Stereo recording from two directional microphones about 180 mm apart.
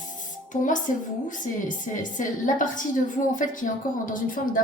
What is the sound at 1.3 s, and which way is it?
A woman's voice, 45° left (ahead or behind).